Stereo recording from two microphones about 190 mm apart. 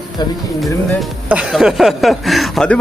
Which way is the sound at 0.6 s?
Centre (ahead or behind).